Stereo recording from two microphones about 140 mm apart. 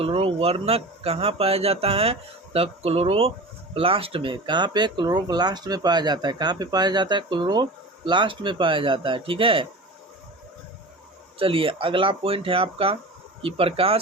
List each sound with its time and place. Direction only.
0.0 s speech: 45° right (ahead or behind)
11.3 s speech: 40° right (ahead or behind)